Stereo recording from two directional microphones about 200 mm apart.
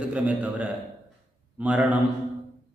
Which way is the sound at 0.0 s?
5° right (ahead or behind).